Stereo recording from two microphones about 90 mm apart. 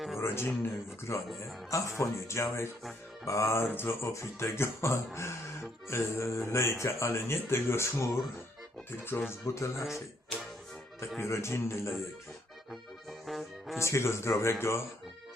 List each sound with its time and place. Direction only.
0.2 s a man's voice: 25° left (ahead or behind)
9.5 s a man's voice: 35° left (ahead or behind)
9.8 s speech: centre (ahead or behind)
11.2 s speech: 30° left (ahead or behind)
13.1 s music: centre (ahead or behind)
13.7 s a man's voice: 30° left (ahead or behind)